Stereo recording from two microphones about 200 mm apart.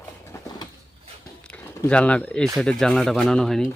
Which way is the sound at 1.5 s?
5° left (ahead or behind).